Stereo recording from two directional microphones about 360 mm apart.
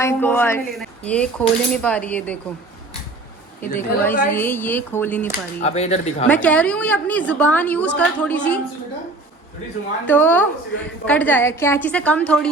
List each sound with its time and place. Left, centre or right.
0.0 s speech: centre
3.8 s speech: centre
5.3 s speech: centre
6.2 s speech: centre
10.1 s speech: centre